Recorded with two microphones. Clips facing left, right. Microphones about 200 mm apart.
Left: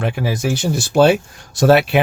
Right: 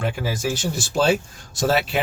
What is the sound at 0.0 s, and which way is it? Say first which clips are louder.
Speech: left 4 dB; 65° left (ahead or behind).